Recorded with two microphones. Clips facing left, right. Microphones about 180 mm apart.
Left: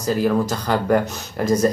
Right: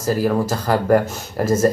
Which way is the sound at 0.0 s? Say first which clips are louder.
Even; 5° right (ahead or behind).